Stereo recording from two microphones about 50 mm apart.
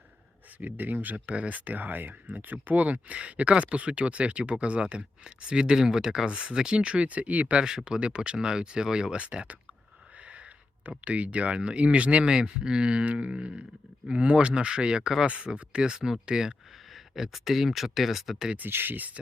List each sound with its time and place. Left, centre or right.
0.6 s speech: right
7.9 s speech: centre
10.8 s speech: right
16.9 s speech: centre
18.7 s speech: right